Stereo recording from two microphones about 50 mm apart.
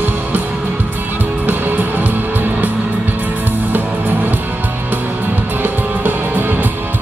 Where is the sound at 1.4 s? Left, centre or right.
Right.